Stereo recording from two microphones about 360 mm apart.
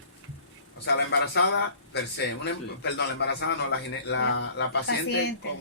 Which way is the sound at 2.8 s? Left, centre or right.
Left.